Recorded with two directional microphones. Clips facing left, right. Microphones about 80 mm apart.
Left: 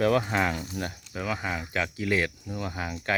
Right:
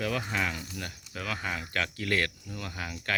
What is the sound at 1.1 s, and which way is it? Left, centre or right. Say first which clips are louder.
Speech: left 3 dB; centre.